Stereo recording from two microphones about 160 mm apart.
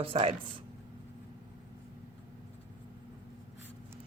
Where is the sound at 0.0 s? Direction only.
35° right (ahead or behind).